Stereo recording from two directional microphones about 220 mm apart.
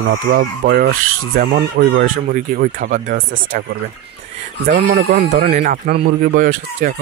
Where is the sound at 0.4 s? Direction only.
45° right (ahead or behind).